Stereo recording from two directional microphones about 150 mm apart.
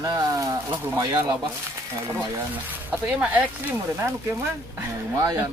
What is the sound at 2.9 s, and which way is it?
Speech, 10° right (ahead or behind).